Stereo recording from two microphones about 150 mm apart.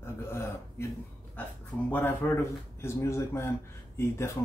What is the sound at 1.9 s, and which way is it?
Speech, 15° left (ahead or behind).